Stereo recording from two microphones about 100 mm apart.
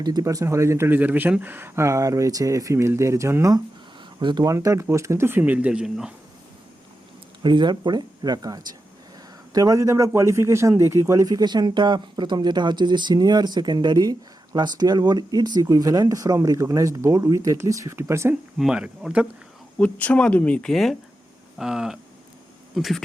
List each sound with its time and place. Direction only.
0.0 s speech: 40° right (ahead or behind)
4.2 s speech: 50° right (ahead or behind)
4.4 s speech: 35° right (ahead or behind); by 6.1 s 5° right (ahead or behind)
7.4 s speech: 50° right (ahead or behind); by 18.3 s 25° right (ahead or behind)
18.5 s speech: 5° right (ahead or behind)
19.8 s speech: 15° left (ahead or behind)
21.6 s a sound: 5° right (ahead or behind)